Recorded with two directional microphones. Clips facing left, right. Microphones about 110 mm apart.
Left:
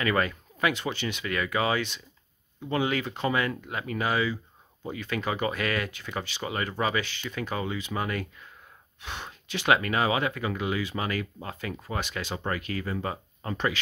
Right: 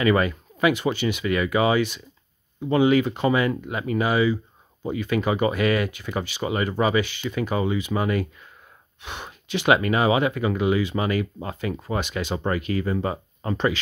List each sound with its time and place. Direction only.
0.0 s speech: 10° right (ahead or behind); by 13.7 s 25° right (ahead or behind)